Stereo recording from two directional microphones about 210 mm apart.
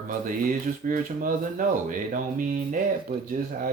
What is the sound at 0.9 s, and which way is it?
Speech, 40° right (ahead or behind).